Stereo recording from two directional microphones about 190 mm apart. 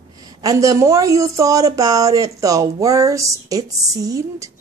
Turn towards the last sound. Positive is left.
turn(degrees=-15)  # may be behind; listen again after turning